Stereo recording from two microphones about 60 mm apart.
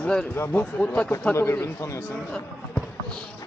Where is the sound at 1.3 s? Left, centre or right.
Left.